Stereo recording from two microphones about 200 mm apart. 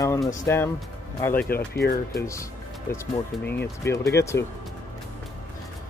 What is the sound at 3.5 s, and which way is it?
Speech, 10° left (ahead or behind).